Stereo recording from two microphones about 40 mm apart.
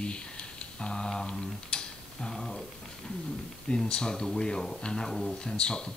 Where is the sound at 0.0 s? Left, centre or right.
Left.